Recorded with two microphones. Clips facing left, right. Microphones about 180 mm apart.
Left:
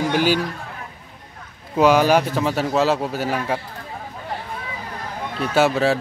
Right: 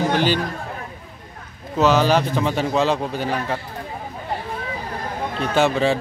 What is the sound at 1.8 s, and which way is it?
A man's voice, 10° left (ahead or behind).